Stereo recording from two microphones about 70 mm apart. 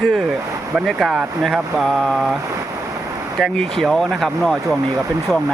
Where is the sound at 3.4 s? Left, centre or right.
Centre.